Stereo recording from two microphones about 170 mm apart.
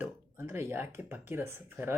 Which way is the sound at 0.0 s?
15° right (ahead or behind).